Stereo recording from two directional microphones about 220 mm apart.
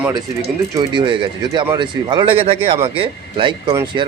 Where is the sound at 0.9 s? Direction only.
20° right (ahead or behind).